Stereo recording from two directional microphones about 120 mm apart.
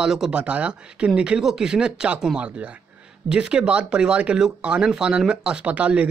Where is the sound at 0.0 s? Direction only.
5° right (ahead or behind).